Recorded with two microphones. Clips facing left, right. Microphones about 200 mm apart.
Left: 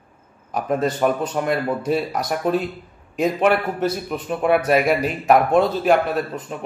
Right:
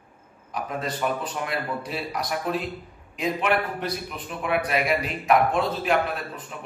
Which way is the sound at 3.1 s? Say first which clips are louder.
Left 6 dB; 45° left (ahead or behind).